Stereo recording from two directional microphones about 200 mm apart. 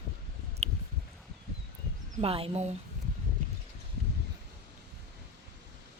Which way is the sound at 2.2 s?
30° right (ahead or behind).